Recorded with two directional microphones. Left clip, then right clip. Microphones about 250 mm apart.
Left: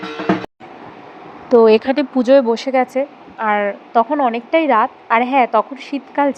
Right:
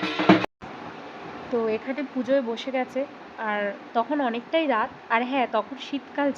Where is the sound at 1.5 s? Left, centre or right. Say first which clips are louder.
Left 16 dB; left.